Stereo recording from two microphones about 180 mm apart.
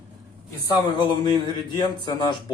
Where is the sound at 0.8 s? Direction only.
25° left (ahead or behind).